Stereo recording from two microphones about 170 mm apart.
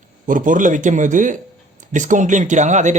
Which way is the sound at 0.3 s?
50° right (ahead or behind).